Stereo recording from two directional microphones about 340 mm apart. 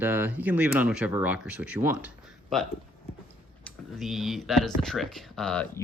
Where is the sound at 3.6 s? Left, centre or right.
Centre.